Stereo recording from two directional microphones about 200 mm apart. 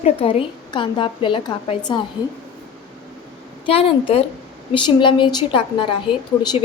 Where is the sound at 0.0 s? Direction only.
30° left (ahead or behind).